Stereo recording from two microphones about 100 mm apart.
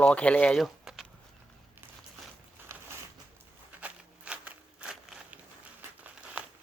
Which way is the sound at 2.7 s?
30° right (ahead or behind).